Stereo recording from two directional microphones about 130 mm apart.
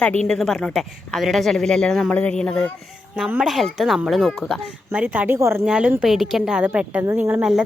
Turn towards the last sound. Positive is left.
turn(degrees=-5)  # may be behind; listen again after turning